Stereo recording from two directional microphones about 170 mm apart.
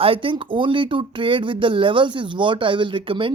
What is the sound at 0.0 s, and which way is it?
Speech, 30° right (ahead or behind).